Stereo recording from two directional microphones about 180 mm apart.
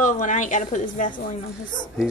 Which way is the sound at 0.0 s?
45° left (ahead or behind).